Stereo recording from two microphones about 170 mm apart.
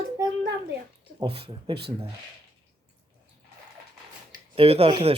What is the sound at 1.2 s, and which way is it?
Speech, 35° right (ahead or behind).